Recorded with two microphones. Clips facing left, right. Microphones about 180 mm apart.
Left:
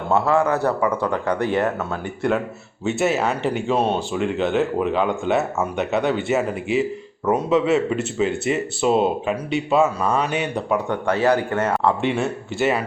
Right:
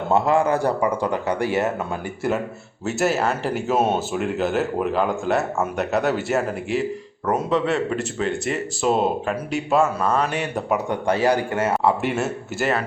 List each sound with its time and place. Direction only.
0.1 s speech: 15° right (ahead or behind)
2.8 s speech: centre (ahead or behind)
10.8 s speech: 15° right (ahead or behind)